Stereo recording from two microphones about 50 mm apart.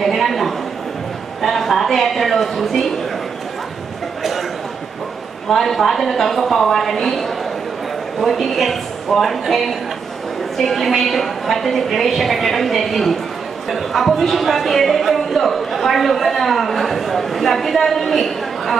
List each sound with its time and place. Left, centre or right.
0.0 s a man's voice: centre
4.2 s a sound: centre
5.5 s a woman's voice: centre